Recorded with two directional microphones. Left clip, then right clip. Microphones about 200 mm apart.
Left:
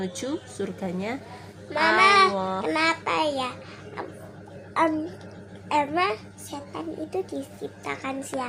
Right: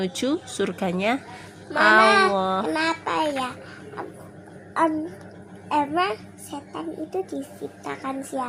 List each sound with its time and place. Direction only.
0.0 s a woman's voice: 35° right (ahead or behind)
2.0 s a child's voice: centre (ahead or behind)
2.3 s a woman's voice: 35° right (ahead or behind)
2.6 s a child's voice: centre (ahead or behind)
4.7 s a child's voice: centre (ahead or behind)